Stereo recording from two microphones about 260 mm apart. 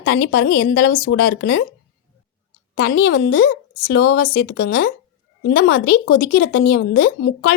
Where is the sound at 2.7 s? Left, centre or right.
Left.